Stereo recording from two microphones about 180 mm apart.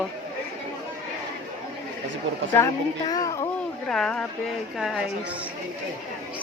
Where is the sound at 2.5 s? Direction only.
20° left (ahead or behind).